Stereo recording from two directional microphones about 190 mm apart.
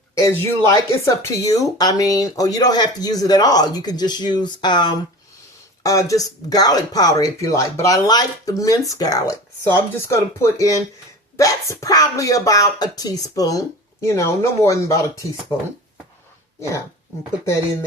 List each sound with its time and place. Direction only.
0.2 s speech: 15° left (ahead or behind)
16.6 s speech: 15° left (ahead or behind)